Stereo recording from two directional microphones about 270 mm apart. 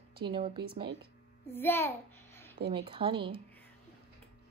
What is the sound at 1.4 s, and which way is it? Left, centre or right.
Speech, centre.